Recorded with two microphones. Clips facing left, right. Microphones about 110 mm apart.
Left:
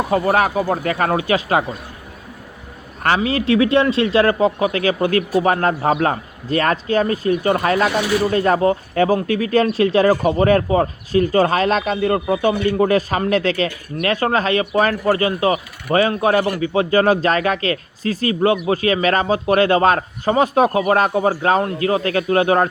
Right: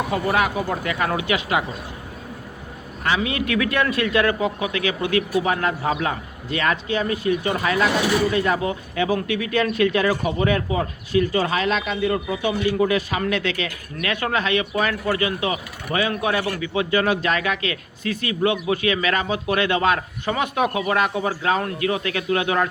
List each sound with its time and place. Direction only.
0.1 s speech: 40° left (ahead or behind)
3.2 s speech: 30° left (ahead or behind)